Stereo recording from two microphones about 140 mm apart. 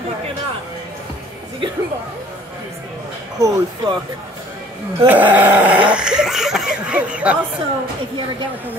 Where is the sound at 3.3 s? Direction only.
25° right (ahead or behind).